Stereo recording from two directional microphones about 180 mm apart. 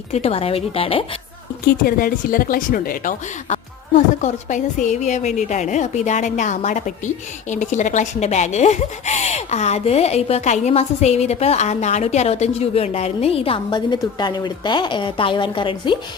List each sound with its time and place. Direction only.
0.1 s speech: 35° left (ahead or behind)
1.6 s speech: 55° left (ahead or behind); by 16.0 s 25° left (ahead or behind)